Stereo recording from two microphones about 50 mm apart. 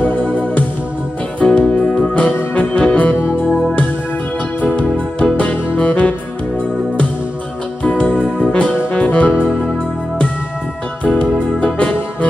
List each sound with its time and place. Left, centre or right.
0.0 s music: left
4.7 s music: left
7.8 s music: left
9.3 s music: centre
11.1 s music: left